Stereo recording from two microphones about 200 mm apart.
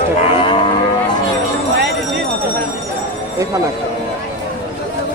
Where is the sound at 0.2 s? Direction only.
25° left (ahead or behind).